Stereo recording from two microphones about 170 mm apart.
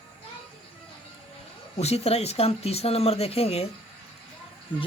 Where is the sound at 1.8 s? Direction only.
40° left (ahead or behind).